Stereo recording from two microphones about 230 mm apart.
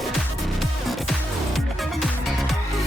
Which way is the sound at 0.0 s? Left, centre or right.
Centre.